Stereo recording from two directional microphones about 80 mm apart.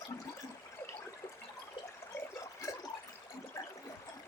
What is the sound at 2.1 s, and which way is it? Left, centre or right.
Water, left.